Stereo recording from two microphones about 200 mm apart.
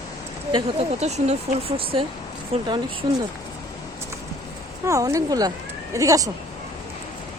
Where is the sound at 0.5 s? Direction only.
35° right (ahead or behind).